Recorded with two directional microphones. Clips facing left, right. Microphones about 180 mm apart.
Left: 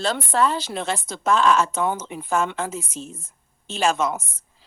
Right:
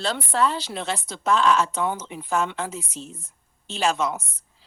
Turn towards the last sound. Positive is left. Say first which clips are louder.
# left 2 dB
turn(degrees=50)  # may be behind; listen again after turning